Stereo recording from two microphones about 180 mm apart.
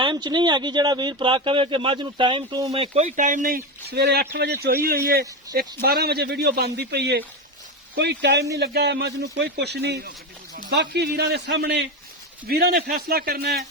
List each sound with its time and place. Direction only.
0.0 s a man's voice: 25° right (ahead or behind); by 13.7 s 60° right (ahead or behind)